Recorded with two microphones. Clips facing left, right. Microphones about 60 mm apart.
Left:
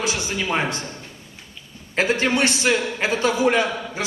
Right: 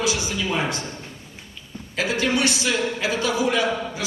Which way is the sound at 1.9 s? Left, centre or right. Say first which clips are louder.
Left 2 dB; left.